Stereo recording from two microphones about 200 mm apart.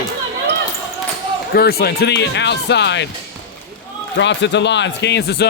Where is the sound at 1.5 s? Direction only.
50° left (ahead or behind).